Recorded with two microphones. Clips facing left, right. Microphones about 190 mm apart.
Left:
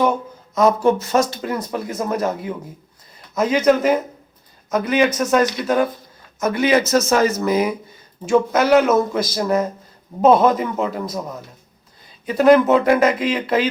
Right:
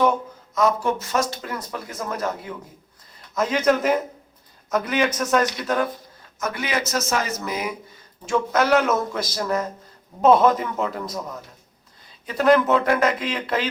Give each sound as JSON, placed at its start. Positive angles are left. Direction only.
{"t": 0.5, "sound": "speech", "side_deg": 25}
{"t": 3.3, "sound": "a man's voice", "side_deg": 5}
{"t": 6.4, "sound": "speech", "side_deg": 25}
{"t": 8.2, "sound": "speech", "side_deg": 10}
{"t": 10.2, "sound": "a man's voice", "side_deg": 5}